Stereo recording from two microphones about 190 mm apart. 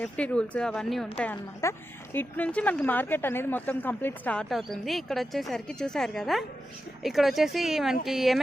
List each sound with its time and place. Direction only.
0.0 s a woman's voice: 5° left (ahead or behind)